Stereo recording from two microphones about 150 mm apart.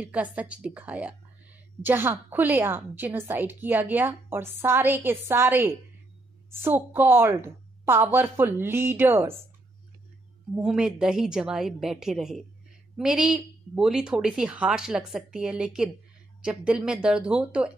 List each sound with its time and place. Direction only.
0.0 s a woman's voice: 10° right (ahead or behind)
10.5 s a woman's voice: 5° right (ahead or behind)